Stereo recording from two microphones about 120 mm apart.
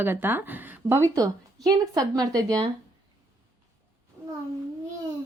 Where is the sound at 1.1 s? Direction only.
30° right (ahead or behind).